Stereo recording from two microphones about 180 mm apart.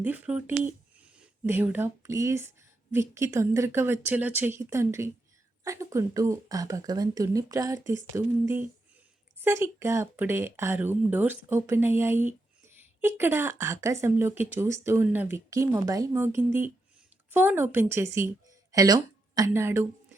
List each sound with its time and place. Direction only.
0.0 s a woman's voice: 10° right (ahead or behind)